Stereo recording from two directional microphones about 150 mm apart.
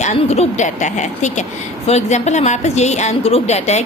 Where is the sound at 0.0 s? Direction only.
45° left (ahead or behind).